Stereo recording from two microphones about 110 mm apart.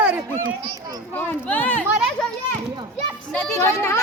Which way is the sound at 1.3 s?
15° left (ahead or behind).